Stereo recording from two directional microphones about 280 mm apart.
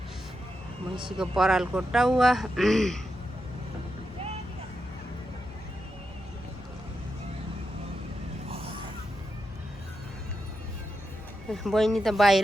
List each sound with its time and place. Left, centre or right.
1.0 s speech: centre
11.5 s speech: centre